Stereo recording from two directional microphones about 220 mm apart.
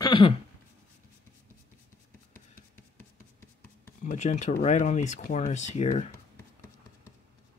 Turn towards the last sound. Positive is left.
turn(degrees=30)  # may be behind; listen again after turning